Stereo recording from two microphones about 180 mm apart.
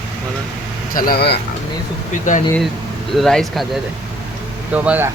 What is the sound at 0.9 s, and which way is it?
Speech, 60° left (ahead or behind).